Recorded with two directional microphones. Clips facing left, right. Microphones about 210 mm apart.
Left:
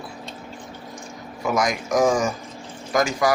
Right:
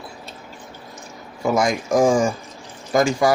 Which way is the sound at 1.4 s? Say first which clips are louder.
Right 3 dB; 30° right (ahead or behind).